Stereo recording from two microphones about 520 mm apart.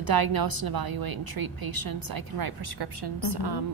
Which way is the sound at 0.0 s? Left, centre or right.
Right.